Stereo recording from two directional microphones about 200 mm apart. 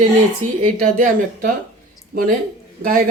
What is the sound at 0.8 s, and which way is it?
Speech, 40° right (ahead or behind).